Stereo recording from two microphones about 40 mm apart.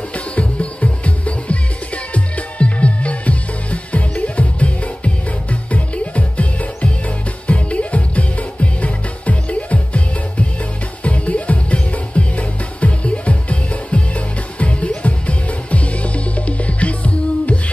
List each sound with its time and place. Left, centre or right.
0.1 s music: left